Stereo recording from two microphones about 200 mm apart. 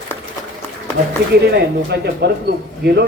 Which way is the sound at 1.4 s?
55° right (ahead or behind).